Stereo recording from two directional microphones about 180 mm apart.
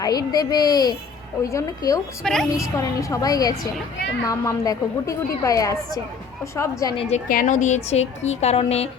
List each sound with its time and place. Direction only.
0.0 s a woman's voice: 20° left (ahead or behind)
2.2 s a woman's voice: centre (ahead or behind)
2.6 s a woman's voice: 15° left (ahead or behind)
6.9 s a woman's voice: 30° left (ahead or behind)
7.3 s a woman's voice: 45° left (ahead or behind)